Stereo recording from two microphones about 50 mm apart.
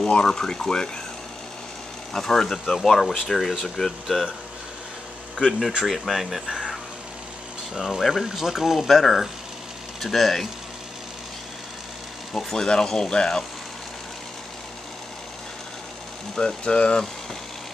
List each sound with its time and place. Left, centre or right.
0.0 s speech: centre
2.1 s speech: centre
5.9 s speech: centre
7.7 s speech: centre
8.0 s speech: centre
12.4 s speech: centre
16.3 s speech: centre